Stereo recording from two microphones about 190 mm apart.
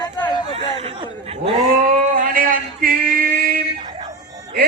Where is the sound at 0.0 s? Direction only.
20° left (ahead or behind).